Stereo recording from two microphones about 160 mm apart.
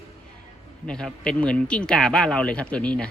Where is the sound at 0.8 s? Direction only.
5° left (ahead or behind).